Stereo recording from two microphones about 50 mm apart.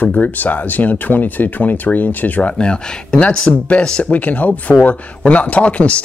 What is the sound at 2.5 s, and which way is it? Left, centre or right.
Speech, centre.